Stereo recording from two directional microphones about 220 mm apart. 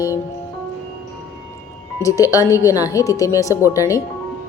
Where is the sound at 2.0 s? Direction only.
15° left (ahead or behind).